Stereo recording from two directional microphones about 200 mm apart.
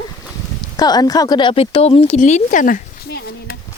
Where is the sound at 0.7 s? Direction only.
20° left (ahead or behind); by 3.5 s 50° left (ahead or behind).